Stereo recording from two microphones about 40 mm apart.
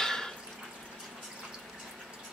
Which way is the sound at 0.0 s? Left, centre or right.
Centre.